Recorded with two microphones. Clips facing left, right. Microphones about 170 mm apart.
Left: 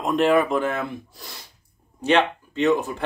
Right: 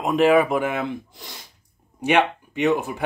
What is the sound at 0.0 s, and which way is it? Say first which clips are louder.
Speech: right 2 dB; 5° right (ahead or behind).